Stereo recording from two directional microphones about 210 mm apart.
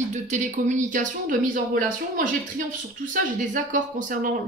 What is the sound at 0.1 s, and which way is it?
Speech, 35° right (ahead or behind).